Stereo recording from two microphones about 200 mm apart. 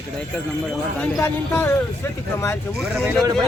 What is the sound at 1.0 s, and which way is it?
Speech, 10° left (ahead or behind).